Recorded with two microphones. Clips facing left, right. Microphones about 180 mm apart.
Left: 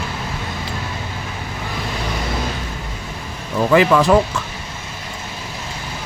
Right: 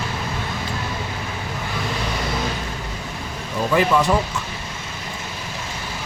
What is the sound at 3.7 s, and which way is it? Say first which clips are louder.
Speech: left 4 dB; 90° left.